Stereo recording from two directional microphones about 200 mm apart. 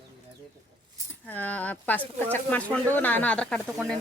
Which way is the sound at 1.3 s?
10° left (ahead or behind).